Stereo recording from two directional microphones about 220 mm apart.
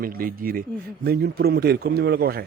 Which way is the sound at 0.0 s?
40° right (ahead or behind).